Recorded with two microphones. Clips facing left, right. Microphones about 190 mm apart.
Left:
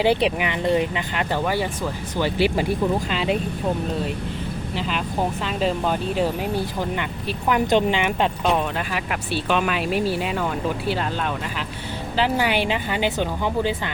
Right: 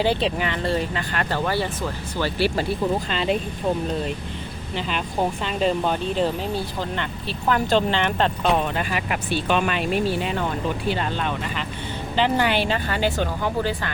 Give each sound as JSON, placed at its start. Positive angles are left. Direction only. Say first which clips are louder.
{"t": 0.0, "sound": "speech", "louder": "left 2 dB", "side_deg": 15}
{"t": 5.5, "sound": "speech", "louder": "right 1 dB", "side_deg": 0}
{"t": 8.4, "sound": "speech", "louder": "even", "side_deg": 0}